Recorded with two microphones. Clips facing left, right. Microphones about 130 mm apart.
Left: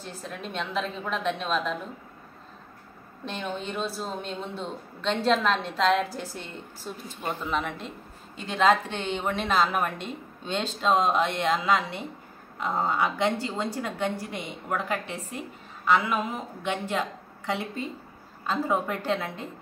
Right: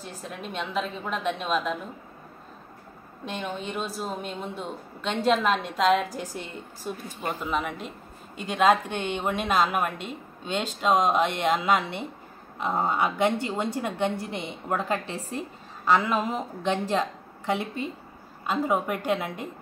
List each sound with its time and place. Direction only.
0.0 s a woman's voice: 5° right (ahead or behind)
3.3 s a woman's voice: 5° right (ahead or behind); by 15.0 s 25° right (ahead or behind)
15.9 s speech: 35° right (ahead or behind)
18.5 s a woman's voice: 15° right (ahead or behind)